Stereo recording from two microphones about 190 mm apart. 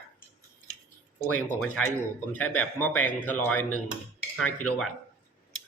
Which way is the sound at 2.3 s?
5° left (ahead or behind).